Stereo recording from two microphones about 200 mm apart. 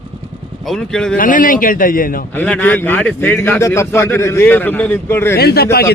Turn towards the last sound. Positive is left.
turn(degrees=50)  # may be behind; listen again after turning